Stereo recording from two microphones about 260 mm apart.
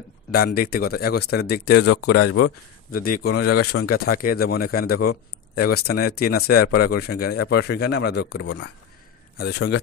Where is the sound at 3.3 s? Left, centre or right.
Left.